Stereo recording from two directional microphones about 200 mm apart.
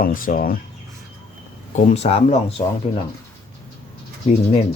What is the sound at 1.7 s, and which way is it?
Speech, 30° left (ahead or behind).